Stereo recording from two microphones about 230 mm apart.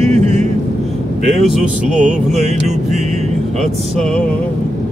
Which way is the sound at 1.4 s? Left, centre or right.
Centre.